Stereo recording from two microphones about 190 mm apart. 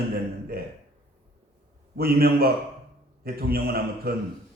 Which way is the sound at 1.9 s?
55° right (ahead or behind).